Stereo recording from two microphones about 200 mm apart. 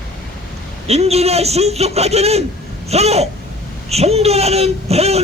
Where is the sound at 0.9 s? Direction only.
30° right (ahead or behind).